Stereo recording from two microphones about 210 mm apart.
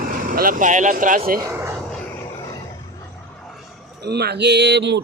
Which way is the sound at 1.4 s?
15° right (ahead or behind).